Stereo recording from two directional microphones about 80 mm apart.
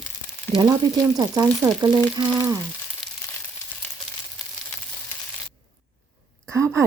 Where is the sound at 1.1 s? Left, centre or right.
Right.